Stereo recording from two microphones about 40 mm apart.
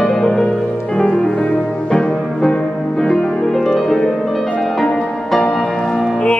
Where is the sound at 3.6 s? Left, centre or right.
Centre.